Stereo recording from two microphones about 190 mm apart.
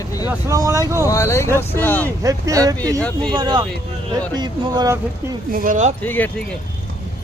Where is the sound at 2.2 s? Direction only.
15° right (ahead or behind).